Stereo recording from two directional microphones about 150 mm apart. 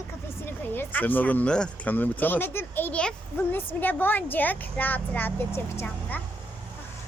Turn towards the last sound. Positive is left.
turn(degrees=15)  # may be behind; listen again after turning